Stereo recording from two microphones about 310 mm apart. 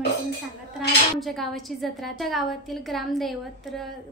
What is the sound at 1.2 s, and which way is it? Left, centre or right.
A woman's voice, centre.